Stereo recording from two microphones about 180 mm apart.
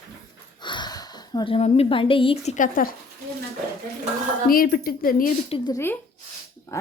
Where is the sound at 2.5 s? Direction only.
50° left (ahead or behind).